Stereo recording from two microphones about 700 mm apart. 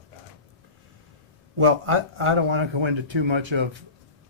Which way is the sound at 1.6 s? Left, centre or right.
Right.